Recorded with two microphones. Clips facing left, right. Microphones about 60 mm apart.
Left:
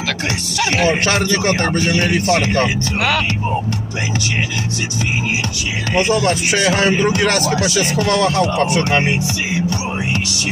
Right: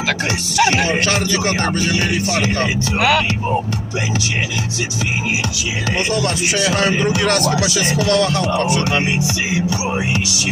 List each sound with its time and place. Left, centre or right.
0.5 s speech: centre
0.9 s speech: left
3.0 s speech: centre
7.1 s speech: centre
9.1 s speech: centre